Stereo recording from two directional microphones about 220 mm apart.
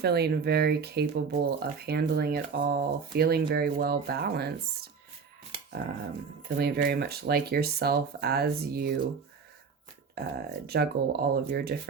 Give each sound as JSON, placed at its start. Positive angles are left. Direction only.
{"t": 0.0, "sound": "speech", "side_deg": -45}
{"t": 6.6, "sound": "speech", "side_deg": -45}
{"t": 10.2, "sound": "speech", "side_deg": -45}